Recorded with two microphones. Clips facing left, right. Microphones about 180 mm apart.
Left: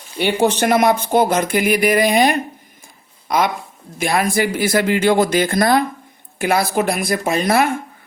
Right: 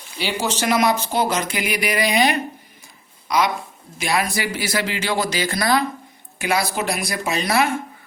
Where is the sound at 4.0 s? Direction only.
50° left (ahead or behind).